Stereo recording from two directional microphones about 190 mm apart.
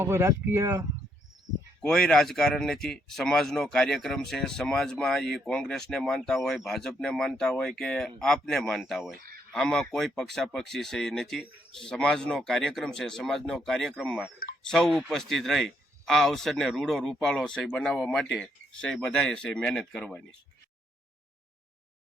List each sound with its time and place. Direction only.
0.0 s speech: 15° right (ahead or behind)
1.8 s speech: 5° left (ahead or behind)
9.1 s a sound: 50° right (ahead or behind)
9.5 s speech: 5° left (ahead or behind)